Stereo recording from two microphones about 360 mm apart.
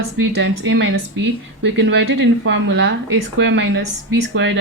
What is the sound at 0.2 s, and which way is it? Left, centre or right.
Speech, right.